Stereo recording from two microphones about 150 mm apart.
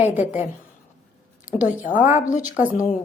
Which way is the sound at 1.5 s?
60° left (ahead or behind).